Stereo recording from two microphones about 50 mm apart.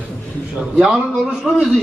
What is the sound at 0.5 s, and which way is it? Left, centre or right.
A man's voice, centre.